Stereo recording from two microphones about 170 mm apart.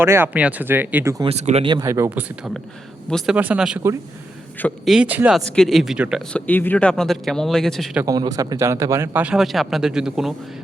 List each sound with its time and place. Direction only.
0.0 s speech: 15° right (ahead or behind)
1.2 s speech: 40° right (ahead or behind)
1.8 s speech: 15° right (ahead or behind); by 3.3 s 5° left (ahead or behind)
3.3 s speech: 10° right (ahead or behind)
4.9 s speech: 5° right (ahead or behind)
6.4 s speech: 10° left (ahead or behind)
8.0 s speech: 20° right (ahead or behind); by 10.3 s 5° right (ahead or behind)